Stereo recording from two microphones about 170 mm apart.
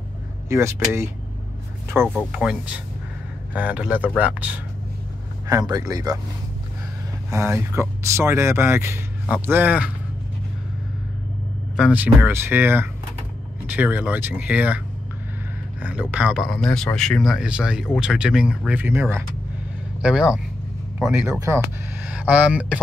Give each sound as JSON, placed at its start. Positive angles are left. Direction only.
{"t": 0.5, "sound": "speech", "side_deg": -15}
{"t": 2.0, "sound": "speech", "side_deg": -5}
{"t": 5.5, "sound": "speech", "side_deg": -20}
{"t": 7.2, "sound": "speech", "side_deg": -15}
{"t": 11.7, "sound": "speech", "side_deg": -5}
{"t": 15.8, "sound": "speech", "side_deg": -5}